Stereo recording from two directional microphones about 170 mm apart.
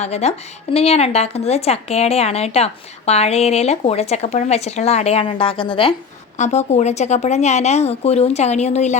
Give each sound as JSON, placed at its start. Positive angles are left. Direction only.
{"t": 0.0, "sound": "speech", "side_deg": 40}
{"t": 6.3, "sound": "speech", "side_deg": 40}